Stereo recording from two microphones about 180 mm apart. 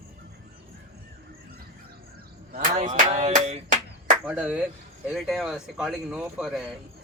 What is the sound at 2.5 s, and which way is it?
Music, 45° right (ahead or behind).